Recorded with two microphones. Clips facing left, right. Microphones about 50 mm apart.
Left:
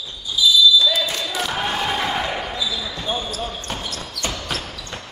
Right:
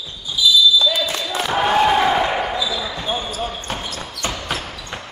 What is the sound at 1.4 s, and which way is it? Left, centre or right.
Crowd, centre.